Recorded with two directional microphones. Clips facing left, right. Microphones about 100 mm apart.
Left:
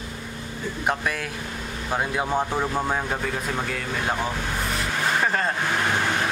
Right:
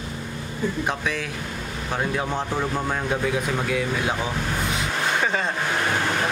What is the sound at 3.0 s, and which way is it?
Speech, 5° right (ahead or behind).